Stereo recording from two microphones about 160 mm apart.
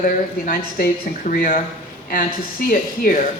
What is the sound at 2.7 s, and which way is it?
Speech, 60° left (ahead or behind).